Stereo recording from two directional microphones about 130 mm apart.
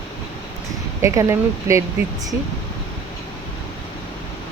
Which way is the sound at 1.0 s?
20° right (ahead or behind).